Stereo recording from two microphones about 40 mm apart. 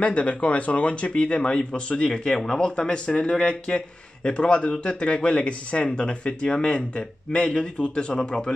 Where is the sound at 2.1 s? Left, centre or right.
Centre.